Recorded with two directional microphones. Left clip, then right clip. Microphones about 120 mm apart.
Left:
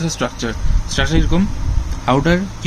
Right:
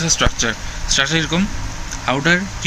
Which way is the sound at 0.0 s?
35° left (ahead or behind).